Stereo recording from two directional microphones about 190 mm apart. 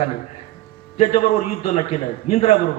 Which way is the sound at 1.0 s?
35° left (ahead or behind).